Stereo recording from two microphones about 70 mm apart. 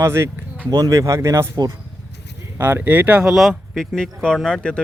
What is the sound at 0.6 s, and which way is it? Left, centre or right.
Speech, right.